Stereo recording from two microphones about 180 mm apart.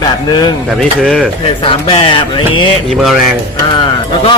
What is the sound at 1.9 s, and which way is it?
Speech, 30° left (ahead or behind).